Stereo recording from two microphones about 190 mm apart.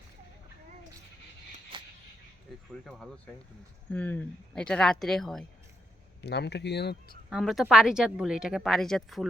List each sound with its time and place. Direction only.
1.7 s a sound: 25° right (ahead or behind)
2.5 s cricket: centre (ahead or behind)
3.9 s speech: 10° left (ahead or behind)
6.2 s speech: 60° left (ahead or behind)
7.3 s speech: centre (ahead or behind)